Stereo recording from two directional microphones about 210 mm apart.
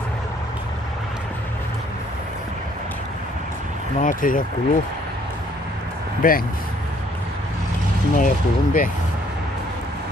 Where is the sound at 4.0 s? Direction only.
40° left (ahead or behind).